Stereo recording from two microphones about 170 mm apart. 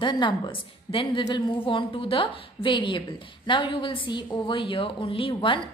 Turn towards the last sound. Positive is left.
turn(degrees=30)  # may be behind; listen again after turning